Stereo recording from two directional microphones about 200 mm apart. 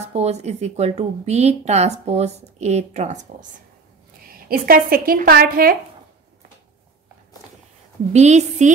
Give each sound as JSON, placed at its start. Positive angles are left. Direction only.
{"t": 0.1, "sound": "a woman's voice", "side_deg": -35}
{"t": 4.3, "sound": "a woman's voice", "side_deg": -45}
{"t": 8.1, "sound": "a woman's voice", "side_deg": -35}